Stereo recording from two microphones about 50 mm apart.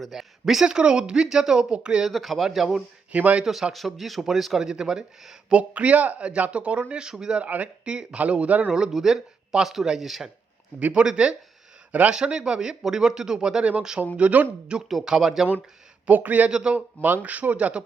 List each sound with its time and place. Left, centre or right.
0.0 s speech: centre
2.0 s speech: centre
3.1 s speech: right
3.4 s speech: centre
7.3 s speech: right
8.7 s speech: centre
10.9 s speech: centre
11.9 s a man's voice: right
12.1 s speech: centre
14.8 s speech: centre
16.0 s speech: right
16.5 s speech: centre
16.7 s speech: right